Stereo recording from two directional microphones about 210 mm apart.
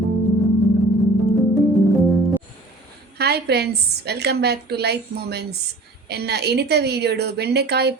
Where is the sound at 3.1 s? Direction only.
50° right (ahead or behind).